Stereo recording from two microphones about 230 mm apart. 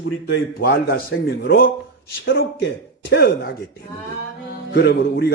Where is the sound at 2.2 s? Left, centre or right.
Left.